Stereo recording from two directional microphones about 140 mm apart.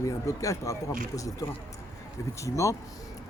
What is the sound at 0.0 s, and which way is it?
Speech, 25° left (ahead or behind).